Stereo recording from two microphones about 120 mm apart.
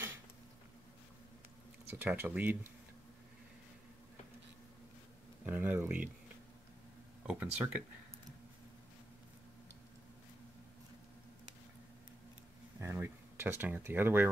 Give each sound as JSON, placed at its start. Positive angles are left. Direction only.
{"t": 1.9, "sound": "speech", "side_deg": -15}
{"t": 5.4, "sound": "speech", "side_deg": -15}
{"t": 7.2, "sound": "speech", "side_deg": -10}
{"t": 12.8, "sound": "speech", "side_deg": -20}